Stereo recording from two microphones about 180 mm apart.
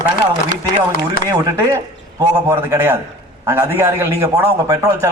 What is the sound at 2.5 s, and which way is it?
A man's voice, 15° right (ahead or behind).